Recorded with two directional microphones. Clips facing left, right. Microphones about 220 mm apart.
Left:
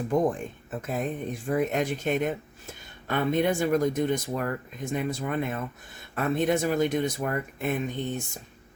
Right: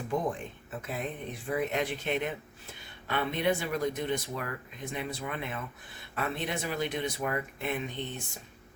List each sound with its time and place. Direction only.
0.1 s speech: 45° left (ahead or behind)